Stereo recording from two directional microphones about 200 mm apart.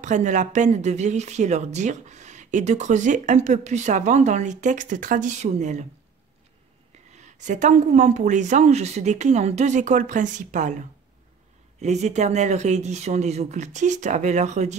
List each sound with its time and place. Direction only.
0.0 s speech: 35° right (ahead or behind)
7.2 s speech: 35° right (ahead or behind)
11.8 s speech: 35° right (ahead or behind)